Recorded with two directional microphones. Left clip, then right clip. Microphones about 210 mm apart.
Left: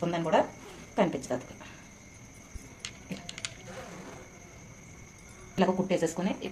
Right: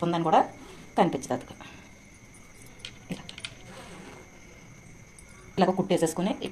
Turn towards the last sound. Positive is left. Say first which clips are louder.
# right 3 dB
turn(degrees=-45)  # may be behind; listen again after turning